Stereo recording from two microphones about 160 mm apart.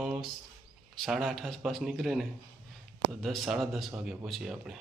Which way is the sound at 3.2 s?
Centre (ahead or behind).